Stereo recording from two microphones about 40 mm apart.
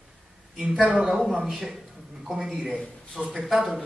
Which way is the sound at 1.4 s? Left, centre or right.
Centre.